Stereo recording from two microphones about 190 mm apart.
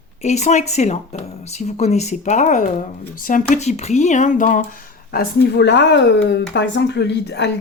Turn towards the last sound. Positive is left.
turn(degrees=65)  # may be behind; listen again after turning